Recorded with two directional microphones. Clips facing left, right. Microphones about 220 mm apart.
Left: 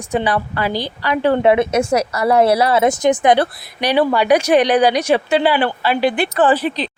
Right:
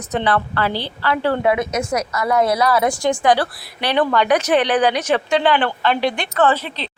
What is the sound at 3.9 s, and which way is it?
Speech, 10° left (ahead or behind).